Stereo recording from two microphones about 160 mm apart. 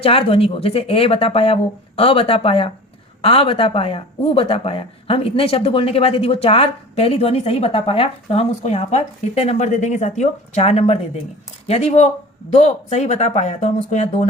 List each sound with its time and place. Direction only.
0.0 s speech: 35° left (ahead or behind)